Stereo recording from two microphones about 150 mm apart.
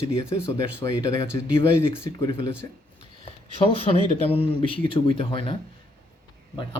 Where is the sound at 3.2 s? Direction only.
40° left (ahead or behind).